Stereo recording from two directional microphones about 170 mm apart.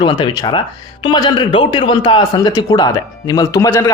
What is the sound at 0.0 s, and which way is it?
Speech, 30° left (ahead or behind).